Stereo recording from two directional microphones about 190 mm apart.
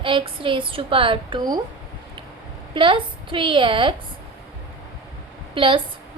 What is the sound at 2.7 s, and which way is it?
A woman's voice, 25° right (ahead or behind).